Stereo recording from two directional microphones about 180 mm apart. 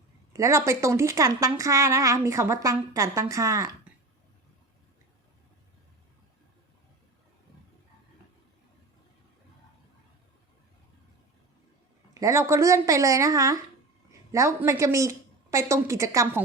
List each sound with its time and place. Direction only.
0.3 s a woman's voice: 15° right (ahead or behind)
12.1 s a woman's voice: 15° right (ahead or behind)